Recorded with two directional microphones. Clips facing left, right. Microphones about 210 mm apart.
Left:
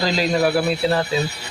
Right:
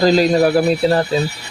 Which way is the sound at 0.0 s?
40° right (ahead or behind).